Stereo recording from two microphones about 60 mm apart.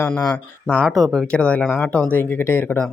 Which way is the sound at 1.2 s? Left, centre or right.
Centre.